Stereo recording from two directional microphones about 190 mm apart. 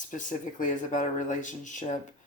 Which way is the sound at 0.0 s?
40° left (ahead or behind).